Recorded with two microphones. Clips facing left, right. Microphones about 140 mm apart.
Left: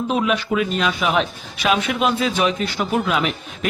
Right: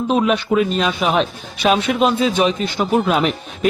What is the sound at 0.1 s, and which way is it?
Speech, 30° right (ahead or behind).